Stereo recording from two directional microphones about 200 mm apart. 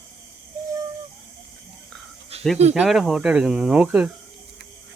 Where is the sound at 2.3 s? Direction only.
30° right (ahead or behind).